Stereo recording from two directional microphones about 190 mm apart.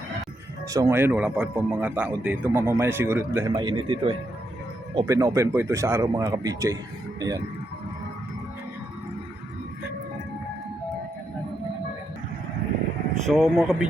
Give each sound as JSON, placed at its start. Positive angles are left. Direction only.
{"t": 0.7, "sound": "speech", "side_deg": -15}
{"t": 3.5, "sound": "speech", "side_deg": -25}
{"t": 13.2, "sound": "speech", "side_deg": 0}